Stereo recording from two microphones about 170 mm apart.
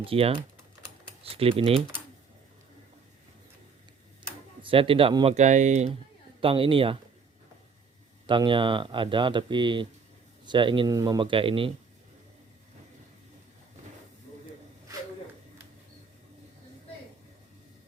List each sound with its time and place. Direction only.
0.0 s speech: 35° right (ahead or behind)
4.6 s speech: 30° right (ahead or behind)
8.3 s speech: 30° right (ahead or behind)